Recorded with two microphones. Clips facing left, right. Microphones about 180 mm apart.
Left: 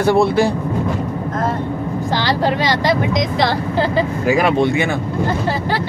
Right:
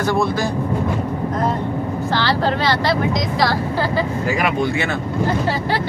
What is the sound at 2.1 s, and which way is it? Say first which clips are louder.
Speech: left 2 dB; 15° left (ahead or behind).